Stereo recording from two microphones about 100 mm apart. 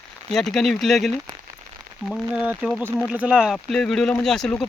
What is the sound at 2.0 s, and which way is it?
Speech, 15° right (ahead or behind).